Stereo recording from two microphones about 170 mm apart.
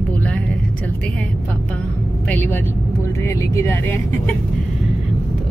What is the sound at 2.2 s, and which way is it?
Speech, 10° left (ahead or behind).